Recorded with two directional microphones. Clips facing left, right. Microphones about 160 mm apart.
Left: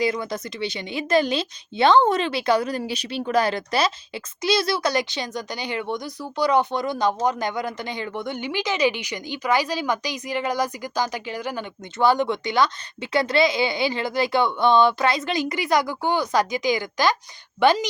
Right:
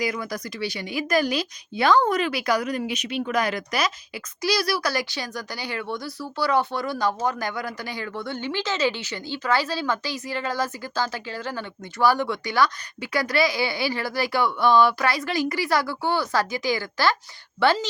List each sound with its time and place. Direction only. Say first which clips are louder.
0.0 s a woman's voice: left 3 dB; 25° left (ahead or behind)